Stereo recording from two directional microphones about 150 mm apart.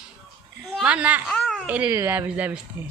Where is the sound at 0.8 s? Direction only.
5° right (ahead or behind).